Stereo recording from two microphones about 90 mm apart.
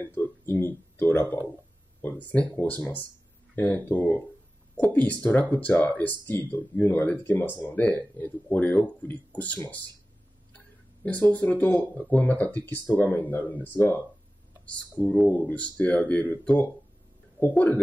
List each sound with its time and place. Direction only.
0.0 s speech: 25° left (ahead or behind)
11.1 s speech: 15° left (ahead or behind)
15.2 s speech: 15° left (ahead or behind)